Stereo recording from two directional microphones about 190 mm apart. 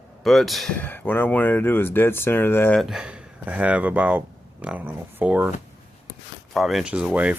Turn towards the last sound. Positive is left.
turn(degrees=-10)  # may be behind; listen again after turning